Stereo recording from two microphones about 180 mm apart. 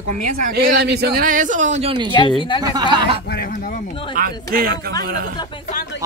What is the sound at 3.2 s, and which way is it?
Speech, 55° left (ahead or behind).